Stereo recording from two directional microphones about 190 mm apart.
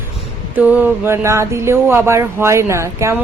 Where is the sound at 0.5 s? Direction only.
10° right (ahead or behind).